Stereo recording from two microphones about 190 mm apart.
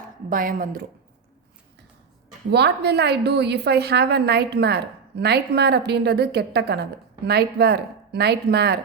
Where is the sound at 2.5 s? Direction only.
60° right (ahead or behind).